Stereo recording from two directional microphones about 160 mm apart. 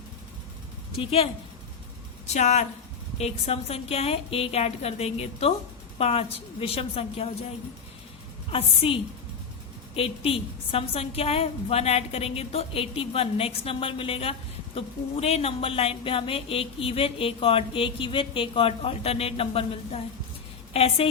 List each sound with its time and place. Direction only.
0.9 s a woman's voice: 35° left (ahead or behind)
8.4 s speech: 35° left (ahead or behind)